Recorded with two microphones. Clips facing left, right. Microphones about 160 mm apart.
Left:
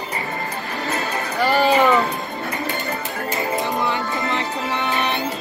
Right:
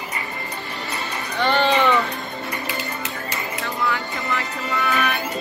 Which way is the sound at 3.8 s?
25° left (ahead or behind).